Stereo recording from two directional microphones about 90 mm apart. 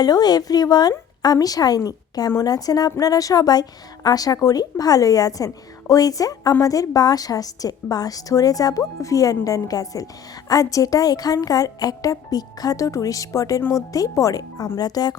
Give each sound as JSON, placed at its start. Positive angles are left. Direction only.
{"t": 0.0, "sound": "a woman's voice", "side_deg": 45}